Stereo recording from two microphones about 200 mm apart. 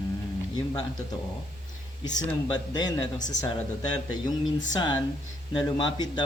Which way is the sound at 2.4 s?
20° left (ahead or behind).